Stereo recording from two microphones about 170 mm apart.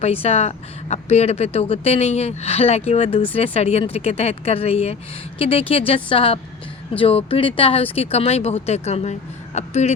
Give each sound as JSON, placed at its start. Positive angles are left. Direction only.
{"t": 0.0, "sound": "a woman's voice", "side_deg": 35}